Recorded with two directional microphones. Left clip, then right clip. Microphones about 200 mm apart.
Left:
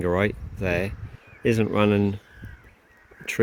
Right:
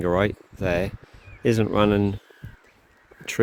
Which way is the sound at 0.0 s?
20° right (ahead or behind).